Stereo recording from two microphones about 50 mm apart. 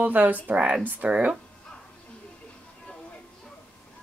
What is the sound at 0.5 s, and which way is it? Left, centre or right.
Speech, right.